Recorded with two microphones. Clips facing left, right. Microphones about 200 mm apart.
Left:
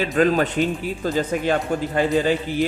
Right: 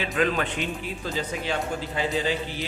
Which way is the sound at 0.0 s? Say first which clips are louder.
Left 7 dB; 40° left (ahead or behind).